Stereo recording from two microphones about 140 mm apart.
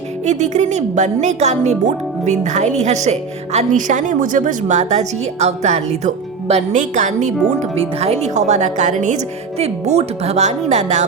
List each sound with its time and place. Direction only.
0.3 s a woman's voice: 55° right (ahead or behind)
7.8 s a woman's voice: 45° right (ahead or behind)